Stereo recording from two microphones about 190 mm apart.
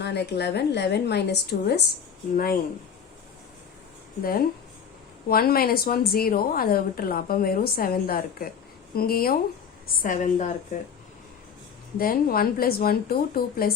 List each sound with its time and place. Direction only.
0.0 s a woman's voice: 60° left (ahead or behind)
4.2 s a woman's voice: 50° left (ahead or behind)
11.9 s a woman's voice: 50° left (ahead or behind)